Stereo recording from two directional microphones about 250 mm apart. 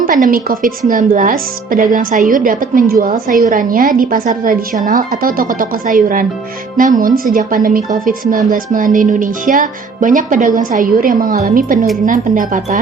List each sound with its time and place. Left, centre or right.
0.0 s speech: right